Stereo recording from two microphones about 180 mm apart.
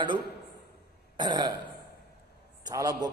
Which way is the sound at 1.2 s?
25° right (ahead or behind).